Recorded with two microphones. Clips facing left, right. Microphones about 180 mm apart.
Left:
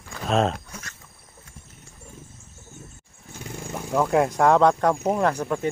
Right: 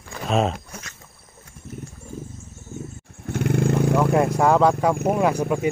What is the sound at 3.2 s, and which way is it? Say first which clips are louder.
Vehicle: right 15 dB; 70° right (ahead or behind).